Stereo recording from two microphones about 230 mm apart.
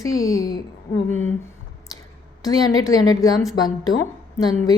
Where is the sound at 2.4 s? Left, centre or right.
Centre.